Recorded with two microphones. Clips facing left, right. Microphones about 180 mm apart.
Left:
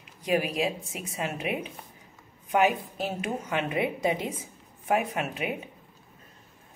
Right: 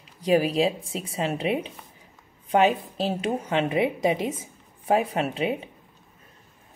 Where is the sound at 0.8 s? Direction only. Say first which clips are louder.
Right 5 dB; 30° right (ahead or behind).